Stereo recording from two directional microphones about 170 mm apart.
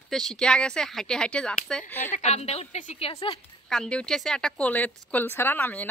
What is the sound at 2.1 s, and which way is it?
Speech, 40° left (ahead or behind).